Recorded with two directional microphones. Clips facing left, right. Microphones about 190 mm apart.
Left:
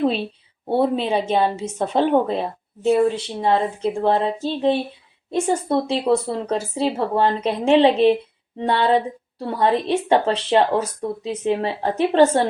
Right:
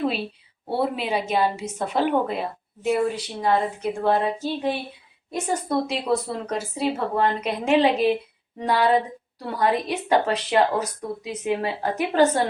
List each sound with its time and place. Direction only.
0.8 s a woman's voice: 30° left (ahead or behind)